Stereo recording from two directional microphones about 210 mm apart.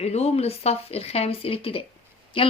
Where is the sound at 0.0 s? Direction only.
30° left (ahead or behind).